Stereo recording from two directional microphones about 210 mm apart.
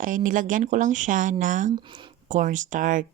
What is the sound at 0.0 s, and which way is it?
Speech, 40° right (ahead or behind).